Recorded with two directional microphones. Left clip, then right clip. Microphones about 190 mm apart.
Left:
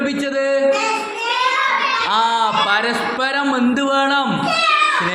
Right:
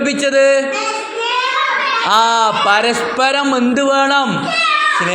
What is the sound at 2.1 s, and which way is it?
A man's voice, 25° right (ahead or behind).